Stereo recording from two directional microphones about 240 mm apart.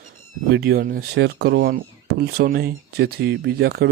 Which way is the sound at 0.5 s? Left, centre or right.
Right.